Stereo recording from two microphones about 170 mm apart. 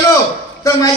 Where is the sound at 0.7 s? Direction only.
20° left (ahead or behind).